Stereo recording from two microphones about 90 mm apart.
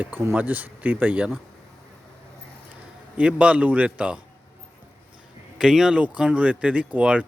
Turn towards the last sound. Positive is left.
turn(degrees=-15)  # may be behind; listen again after turning